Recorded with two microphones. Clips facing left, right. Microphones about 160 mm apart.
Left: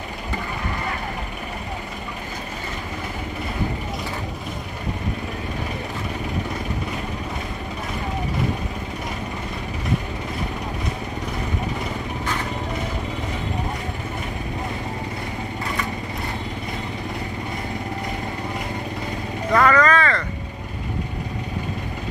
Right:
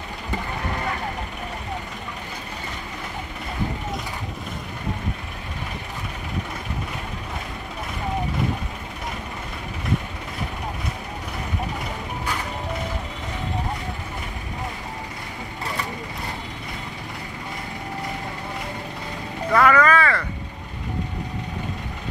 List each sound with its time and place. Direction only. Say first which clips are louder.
19.5 s vehicle: even; 5° right (ahead or behind)